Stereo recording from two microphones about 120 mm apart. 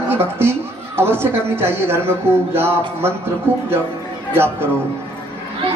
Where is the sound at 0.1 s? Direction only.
20° right (ahead or behind).